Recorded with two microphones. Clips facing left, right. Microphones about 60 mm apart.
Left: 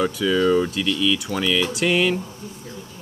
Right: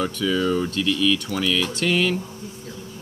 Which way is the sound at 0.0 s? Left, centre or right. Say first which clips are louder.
Left 3 dB; centre.